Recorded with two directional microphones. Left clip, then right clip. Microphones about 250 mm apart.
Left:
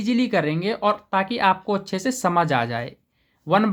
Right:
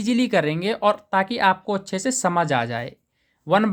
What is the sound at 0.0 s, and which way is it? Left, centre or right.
Speech, right.